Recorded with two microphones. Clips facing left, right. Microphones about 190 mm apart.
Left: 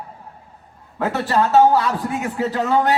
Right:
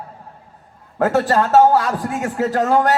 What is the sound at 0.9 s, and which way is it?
A man's voice, 45° right (ahead or behind).